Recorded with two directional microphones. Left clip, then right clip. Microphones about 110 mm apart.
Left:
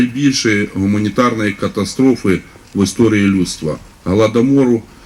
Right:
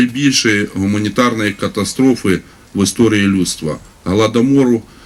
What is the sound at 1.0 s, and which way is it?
Speech, 50° right (ahead or behind).